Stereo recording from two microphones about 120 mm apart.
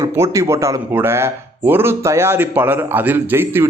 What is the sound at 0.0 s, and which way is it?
Speech, 25° right (ahead or behind).